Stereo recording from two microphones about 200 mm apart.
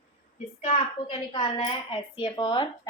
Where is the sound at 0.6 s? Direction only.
30° left (ahead or behind).